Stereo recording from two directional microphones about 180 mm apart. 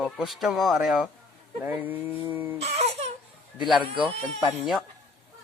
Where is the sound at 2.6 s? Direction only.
35° right (ahead or behind).